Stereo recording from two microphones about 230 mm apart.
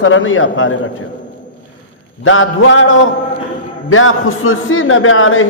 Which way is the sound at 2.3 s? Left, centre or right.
Left.